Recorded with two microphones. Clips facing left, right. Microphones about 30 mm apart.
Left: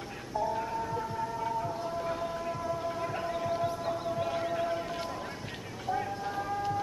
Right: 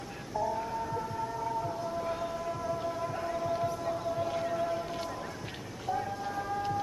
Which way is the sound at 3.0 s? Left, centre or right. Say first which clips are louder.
Even; left.